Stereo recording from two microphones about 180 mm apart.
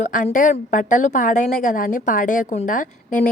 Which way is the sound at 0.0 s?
45° left (ahead or behind).